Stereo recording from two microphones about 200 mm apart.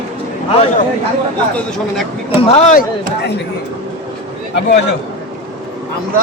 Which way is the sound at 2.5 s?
35° left (ahead or behind).